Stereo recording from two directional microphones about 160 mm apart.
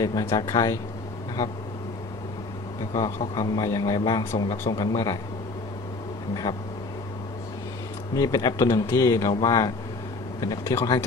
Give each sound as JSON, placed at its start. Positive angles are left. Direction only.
{"t": 0.0, "sound": "a man's voice", "side_deg": 25}
{"t": 3.3, "sound": "a man's voice", "side_deg": 20}
{"t": 8.1, "sound": "a man's voice", "side_deg": 20}